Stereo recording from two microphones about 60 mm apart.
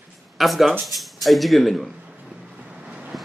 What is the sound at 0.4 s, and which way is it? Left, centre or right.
A man's voice, centre.